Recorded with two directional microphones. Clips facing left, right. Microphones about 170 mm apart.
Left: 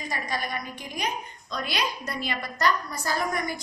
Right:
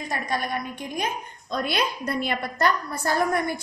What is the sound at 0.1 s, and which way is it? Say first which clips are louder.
A woman's voice: right 4 dB; 55° right (ahead or behind).